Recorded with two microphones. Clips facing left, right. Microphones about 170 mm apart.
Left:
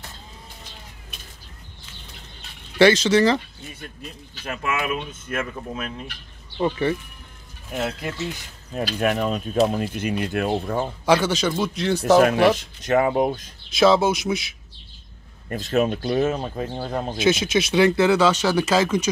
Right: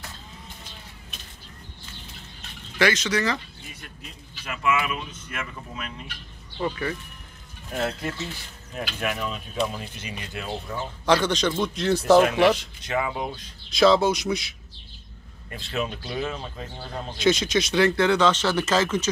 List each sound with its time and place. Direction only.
2.8 s speech: 30° left (ahead or behind)
4.5 s speech: 45° left (ahead or behind)
6.6 s speech: 25° left (ahead or behind)
7.7 s speech: 10° left (ahead or behind)
8.7 s speech: 40° left (ahead or behind); by 10.9 s 55° left (ahead or behind)
11.1 s speech: 5° left (ahead or behind)
12.2 s speech: 45° left (ahead or behind)
13.7 s speech: 5° left (ahead or behind)
15.5 s speech: 45° left (ahead or behind)
17.2 s speech: 5° left (ahead or behind)